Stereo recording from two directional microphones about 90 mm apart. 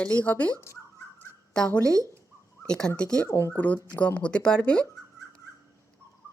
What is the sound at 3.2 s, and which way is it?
Speech, 30° left (ahead or behind).